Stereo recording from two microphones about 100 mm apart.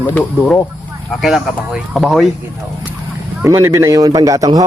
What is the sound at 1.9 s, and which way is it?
Speech, centre (ahead or behind).